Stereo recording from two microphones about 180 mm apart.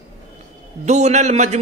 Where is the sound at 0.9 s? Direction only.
40° right (ahead or behind).